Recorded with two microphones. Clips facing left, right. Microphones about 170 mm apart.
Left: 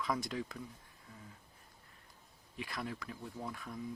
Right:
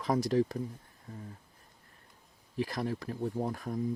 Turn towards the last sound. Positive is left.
turn(degrees=-45)  # may be behind; listen again after turning